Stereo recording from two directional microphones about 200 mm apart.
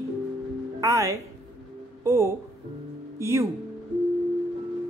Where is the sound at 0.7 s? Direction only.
15° right (ahead or behind).